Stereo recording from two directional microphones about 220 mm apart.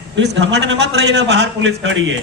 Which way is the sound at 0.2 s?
55° right (ahead or behind).